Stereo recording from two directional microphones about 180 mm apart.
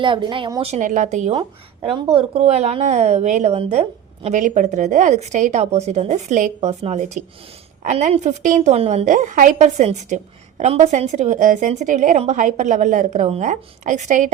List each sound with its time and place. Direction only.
0.0 s speech: 25° right (ahead or behind)
0.7 s a woman's voice: 45° right (ahead or behind)
1.3 s speech: 25° right (ahead or behind)